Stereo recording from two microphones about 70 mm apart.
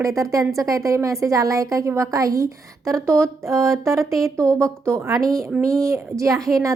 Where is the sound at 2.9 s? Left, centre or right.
Right.